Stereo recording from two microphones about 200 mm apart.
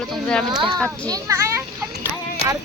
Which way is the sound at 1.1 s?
15° right (ahead or behind).